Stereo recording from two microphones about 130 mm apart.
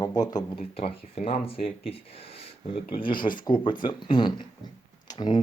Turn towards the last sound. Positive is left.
turn(degrees=35)  # may be behind; listen again after turning